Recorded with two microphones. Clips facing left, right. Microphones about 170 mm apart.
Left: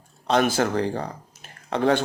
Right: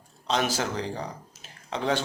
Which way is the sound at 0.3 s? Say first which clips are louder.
Left 6 dB; 55° left (ahead or behind).